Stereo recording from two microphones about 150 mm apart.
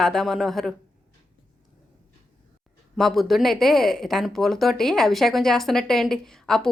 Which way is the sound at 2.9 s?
Centre (ahead or behind).